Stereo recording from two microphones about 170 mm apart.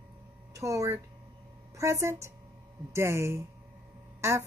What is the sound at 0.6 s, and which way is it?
A woman's voice, 20° right (ahead or behind).